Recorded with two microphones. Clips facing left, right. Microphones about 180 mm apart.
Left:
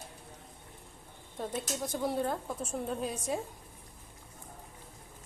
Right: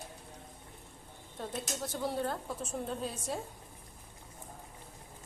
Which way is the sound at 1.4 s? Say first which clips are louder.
Left 3 dB; 10° left (ahead or behind).